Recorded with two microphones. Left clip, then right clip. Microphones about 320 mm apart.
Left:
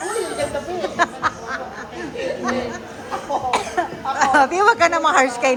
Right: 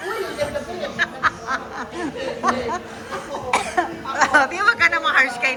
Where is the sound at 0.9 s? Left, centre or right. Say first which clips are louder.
Even; centre.